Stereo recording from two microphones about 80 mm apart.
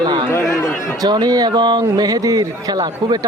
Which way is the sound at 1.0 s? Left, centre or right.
Right.